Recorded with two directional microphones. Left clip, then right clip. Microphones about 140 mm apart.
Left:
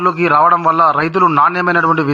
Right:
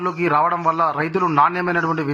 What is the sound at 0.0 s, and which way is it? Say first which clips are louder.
A man's voice: left 7 dB; 25° left (ahead or behind).